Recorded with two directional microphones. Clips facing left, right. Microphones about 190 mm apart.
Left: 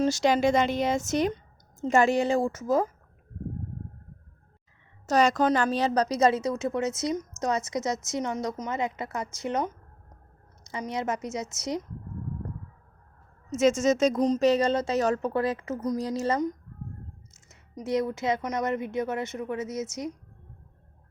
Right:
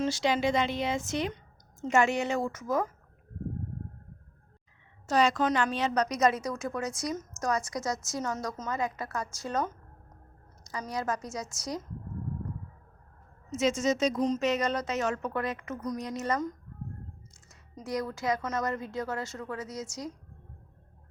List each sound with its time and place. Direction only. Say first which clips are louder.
0.0 s a woman's voice: left 5 dB; 45° left (ahead or behind); by 2.8 s 30° left (ahead or behind)
5.0 s a woman's voice: left 3 dB; 40° left (ahead or behind); by 11.8 s 20° left (ahead or behind)
13.5 s a woman's voice: left 5 dB; 45° left (ahead or behind); by 20.1 s 20° left (ahead or behind)